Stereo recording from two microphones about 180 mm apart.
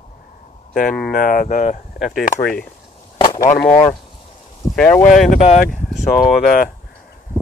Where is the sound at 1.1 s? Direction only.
50° left (ahead or behind).